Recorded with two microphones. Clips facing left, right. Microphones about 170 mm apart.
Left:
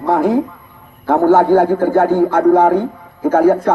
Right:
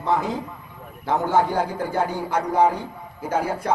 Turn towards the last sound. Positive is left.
turn(degrees=55)  # may be behind; listen again after turning